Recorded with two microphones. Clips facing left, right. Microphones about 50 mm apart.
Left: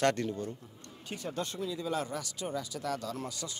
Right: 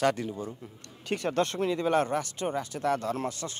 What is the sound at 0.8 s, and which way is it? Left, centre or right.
Speech, right.